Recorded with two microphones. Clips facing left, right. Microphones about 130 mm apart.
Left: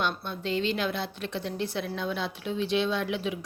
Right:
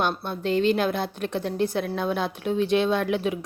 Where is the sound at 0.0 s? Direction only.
50° right (ahead or behind).